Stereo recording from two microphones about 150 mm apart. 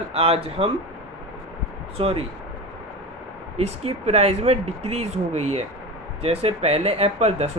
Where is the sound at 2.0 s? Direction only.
40° right (ahead or behind).